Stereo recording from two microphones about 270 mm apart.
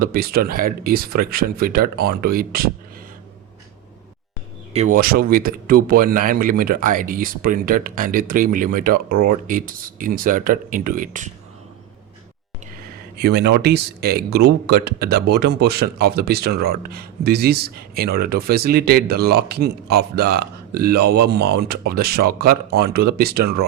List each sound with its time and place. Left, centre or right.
0.0 s speech: right
4.7 s speech: right
13.1 s speech: right